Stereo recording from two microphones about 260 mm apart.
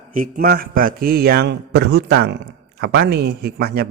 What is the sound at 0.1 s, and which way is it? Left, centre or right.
Speech, right.